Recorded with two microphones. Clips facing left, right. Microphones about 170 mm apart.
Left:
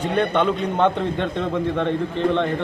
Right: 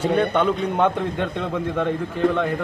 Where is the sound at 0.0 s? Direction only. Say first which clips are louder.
Right 1 dB; 10° right (ahead or behind).